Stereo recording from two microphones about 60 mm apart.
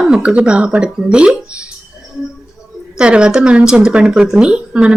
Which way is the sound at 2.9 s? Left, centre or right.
Centre.